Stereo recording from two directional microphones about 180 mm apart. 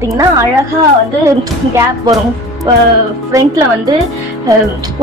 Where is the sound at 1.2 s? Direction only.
15° right (ahead or behind).